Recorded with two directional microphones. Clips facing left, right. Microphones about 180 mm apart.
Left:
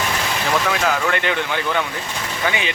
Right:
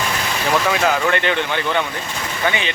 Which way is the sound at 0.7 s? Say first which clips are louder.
Right 2 dB; centre (ahead or behind).